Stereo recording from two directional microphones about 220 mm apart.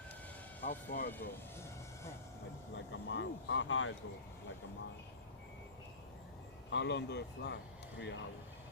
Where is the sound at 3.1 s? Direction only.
55° left (ahead or behind).